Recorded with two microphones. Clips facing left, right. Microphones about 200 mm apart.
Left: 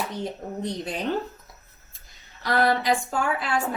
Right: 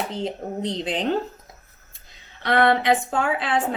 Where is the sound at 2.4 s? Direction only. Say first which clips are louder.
Right 3 dB; 25° right (ahead or behind).